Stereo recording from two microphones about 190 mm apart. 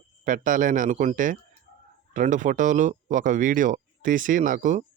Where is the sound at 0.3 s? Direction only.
45° right (ahead or behind).